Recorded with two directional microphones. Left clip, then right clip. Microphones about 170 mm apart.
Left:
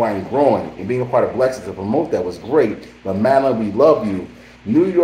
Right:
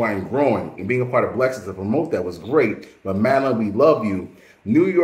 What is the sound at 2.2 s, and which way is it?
Speech, 30° right (ahead or behind).